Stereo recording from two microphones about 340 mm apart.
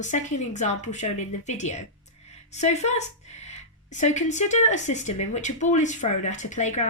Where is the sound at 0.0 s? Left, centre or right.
Left.